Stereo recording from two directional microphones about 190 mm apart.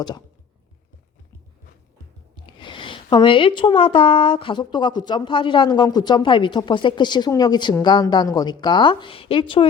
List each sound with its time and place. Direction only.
2.3 s speech: 25° left (ahead or behind)